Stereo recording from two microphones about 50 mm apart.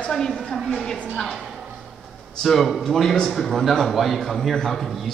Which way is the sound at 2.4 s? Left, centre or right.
Centre.